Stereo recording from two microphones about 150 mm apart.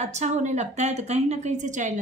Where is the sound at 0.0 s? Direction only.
50° right (ahead or behind).